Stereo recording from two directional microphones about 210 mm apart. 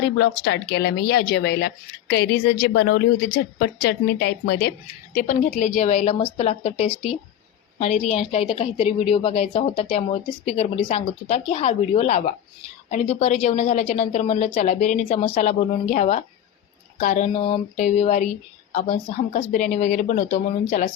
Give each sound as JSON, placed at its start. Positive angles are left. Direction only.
{"t": 0.2, "sound": "speech", "side_deg": 55}
{"t": 5.1, "sound": "a woman's voice", "side_deg": 35}